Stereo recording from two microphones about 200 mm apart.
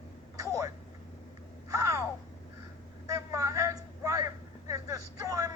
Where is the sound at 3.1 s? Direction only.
15° right (ahead or behind).